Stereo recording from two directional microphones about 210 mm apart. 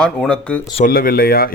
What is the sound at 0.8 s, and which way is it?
Speech, 45° left (ahead or behind).